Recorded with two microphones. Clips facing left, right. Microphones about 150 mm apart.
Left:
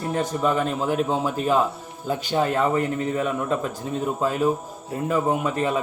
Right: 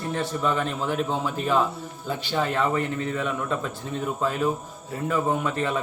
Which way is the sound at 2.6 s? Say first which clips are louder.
Left 3 dB; 15° left (ahead or behind).